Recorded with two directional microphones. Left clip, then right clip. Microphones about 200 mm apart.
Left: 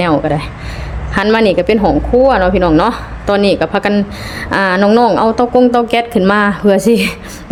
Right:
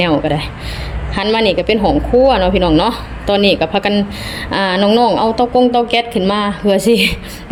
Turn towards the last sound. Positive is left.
turn(degrees=10)  # may be behind; listen again after turning